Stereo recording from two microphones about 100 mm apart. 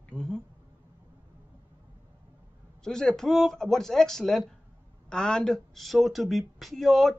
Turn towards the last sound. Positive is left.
turn(degrees=0)  # may be behind; listen again after turning